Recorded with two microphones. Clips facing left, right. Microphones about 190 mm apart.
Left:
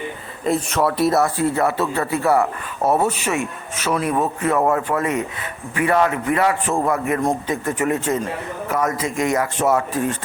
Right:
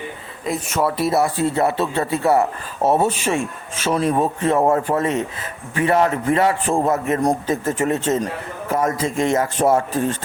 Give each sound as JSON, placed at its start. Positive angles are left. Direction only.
{"t": 0.7, "sound": "speech", "side_deg": 0}
{"t": 1.2, "sound": "a man's voice", "side_deg": -25}